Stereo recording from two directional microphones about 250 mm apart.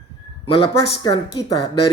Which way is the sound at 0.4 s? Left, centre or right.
Left.